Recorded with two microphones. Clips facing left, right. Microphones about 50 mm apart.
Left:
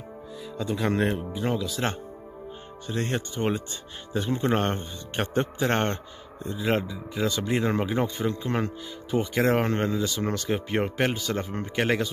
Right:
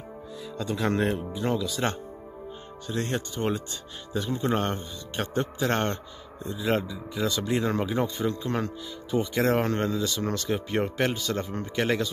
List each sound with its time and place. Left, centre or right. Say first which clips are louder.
0.4 s speech: left 1 dB; centre
2.9 s a man's voice: left 1 dB; centre